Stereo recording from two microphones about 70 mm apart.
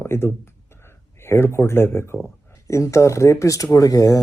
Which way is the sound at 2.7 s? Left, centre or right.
Left.